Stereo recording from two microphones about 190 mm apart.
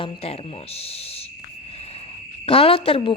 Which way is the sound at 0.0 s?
30° left (ahead or behind).